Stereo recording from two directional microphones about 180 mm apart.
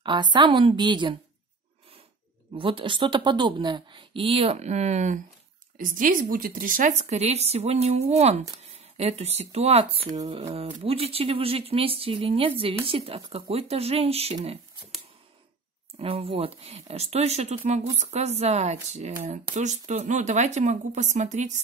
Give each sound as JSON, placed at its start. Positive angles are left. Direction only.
{"t": 0.0, "sound": "a woman's voice", "side_deg": -25}
{"t": 2.5, "sound": "a woman's voice", "side_deg": -30}
{"t": 16.0, "sound": "speech", "side_deg": -30}